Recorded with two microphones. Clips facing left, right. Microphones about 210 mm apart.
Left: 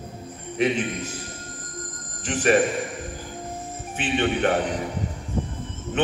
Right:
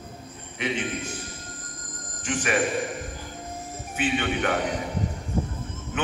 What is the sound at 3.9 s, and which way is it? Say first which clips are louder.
Speech: left 2 dB; 30° left (ahead or behind).